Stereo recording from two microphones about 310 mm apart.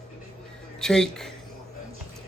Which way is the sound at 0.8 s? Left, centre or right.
Centre.